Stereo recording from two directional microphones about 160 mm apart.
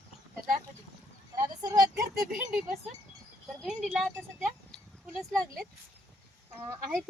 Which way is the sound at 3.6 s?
Centre (ahead or behind).